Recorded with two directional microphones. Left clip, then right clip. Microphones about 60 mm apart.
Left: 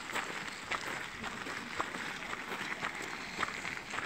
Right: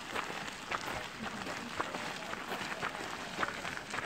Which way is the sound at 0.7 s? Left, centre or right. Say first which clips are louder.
Right 2 dB; left.